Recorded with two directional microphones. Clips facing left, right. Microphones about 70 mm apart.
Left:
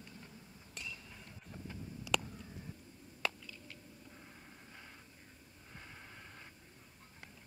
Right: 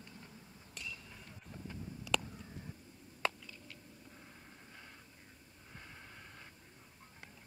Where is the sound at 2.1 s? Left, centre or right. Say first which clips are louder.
Even; centre.